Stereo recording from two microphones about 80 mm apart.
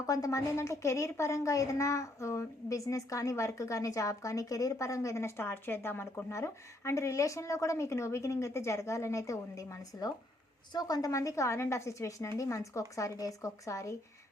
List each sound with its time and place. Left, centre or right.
0.0 s a woman's voice: left
6.3 s a woman's voice: left
10.7 s a woman's voice: left